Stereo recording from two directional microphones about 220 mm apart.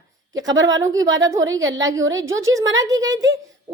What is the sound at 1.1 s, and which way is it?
Speech, 60° right (ahead or behind).